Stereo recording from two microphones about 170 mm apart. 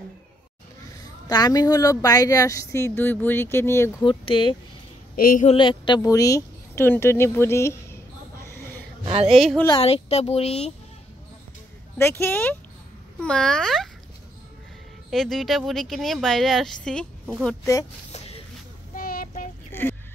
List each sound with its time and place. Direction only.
1.2 s speech: 25° left (ahead or behind)
4.0 s speech: 30° left (ahead or behind)
5.1 s a woman's voice: 55° left (ahead or behind)
5.5 s speech: 30° left (ahead or behind)
9.0 s speech: 35° right (ahead or behind)
9.8 s speech: 35° left (ahead or behind)
12.0 s speech: 15° left (ahead or behind)
15.0 s speech: centre (ahead or behind)
18.1 s a sound: 40° left (ahead or behind)
18.9 s child singing: 55° left (ahead or behind)
19.7 s a sound: 10° left (ahead or behind)